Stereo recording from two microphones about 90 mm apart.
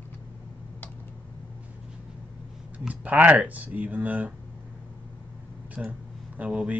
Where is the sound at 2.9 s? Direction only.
15° right (ahead or behind).